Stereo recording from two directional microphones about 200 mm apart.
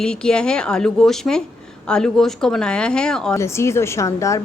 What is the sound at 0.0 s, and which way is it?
A woman's voice, 5° left (ahead or behind).